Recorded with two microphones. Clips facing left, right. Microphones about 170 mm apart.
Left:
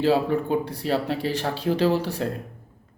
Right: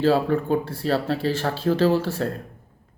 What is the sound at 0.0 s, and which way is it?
Speech, 15° left (ahead or behind).